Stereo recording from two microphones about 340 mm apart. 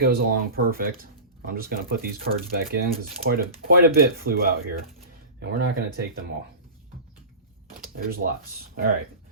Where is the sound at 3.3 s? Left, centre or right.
Right.